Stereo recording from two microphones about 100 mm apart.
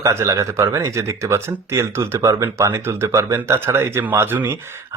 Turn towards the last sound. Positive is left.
turn(degrees=-25)  # may be behind; listen again after turning